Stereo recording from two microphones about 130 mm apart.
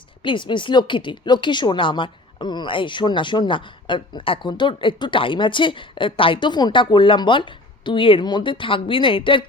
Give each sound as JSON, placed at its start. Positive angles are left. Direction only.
{"t": 0.2, "sound": "a woman's voice", "side_deg": 40}